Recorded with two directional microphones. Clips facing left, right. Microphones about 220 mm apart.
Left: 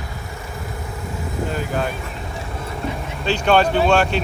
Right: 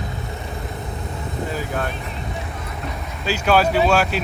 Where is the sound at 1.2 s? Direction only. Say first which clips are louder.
Left 2 dB; centre (ahead or behind).